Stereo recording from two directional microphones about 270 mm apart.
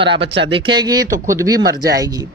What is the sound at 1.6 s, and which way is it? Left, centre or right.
Speech, right.